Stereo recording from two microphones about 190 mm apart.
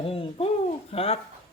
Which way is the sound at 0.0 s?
30° left (ahead or behind).